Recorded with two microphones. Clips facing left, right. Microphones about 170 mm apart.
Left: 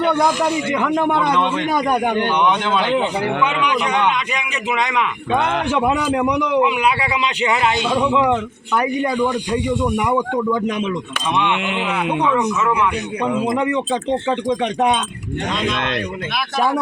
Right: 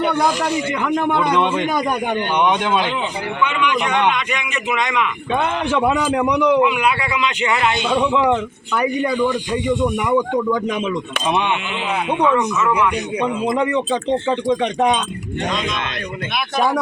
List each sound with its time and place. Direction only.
0.0 s a man's voice: 5° right (ahead or behind)
4.1 s a man's voice: 35° left (ahead or behind)
5.7 s a man's voice: 10° left (ahead or behind)
6.6 s a man's voice: 30° left (ahead or behind)
7.9 s a man's voice: 5° left (ahead or behind)
13.4 s a man's voice: 5° left (ahead or behind)
16.6 s speech: 5° left (ahead or behind)